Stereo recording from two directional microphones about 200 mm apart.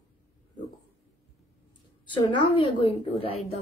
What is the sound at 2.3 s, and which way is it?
Speech, 25° left (ahead or behind).